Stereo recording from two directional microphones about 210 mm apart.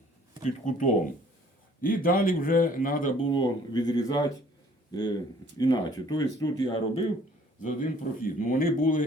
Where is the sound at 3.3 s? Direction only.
20° left (ahead or behind).